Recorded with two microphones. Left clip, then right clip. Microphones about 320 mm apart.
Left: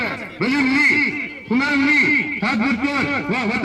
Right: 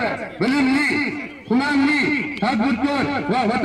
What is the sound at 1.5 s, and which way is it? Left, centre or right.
A man's voice, right.